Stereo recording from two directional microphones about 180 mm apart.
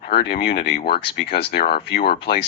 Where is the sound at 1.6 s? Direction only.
60° left (ahead or behind).